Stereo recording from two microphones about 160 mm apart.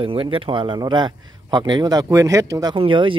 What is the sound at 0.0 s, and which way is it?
Speech, 35° right (ahead or behind).